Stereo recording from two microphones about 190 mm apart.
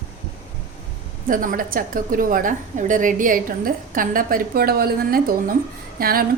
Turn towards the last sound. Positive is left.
turn(degrees=-50)  # may be behind; listen again after turning